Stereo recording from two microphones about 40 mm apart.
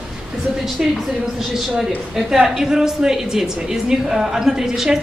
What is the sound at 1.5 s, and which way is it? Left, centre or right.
A woman's voice, centre.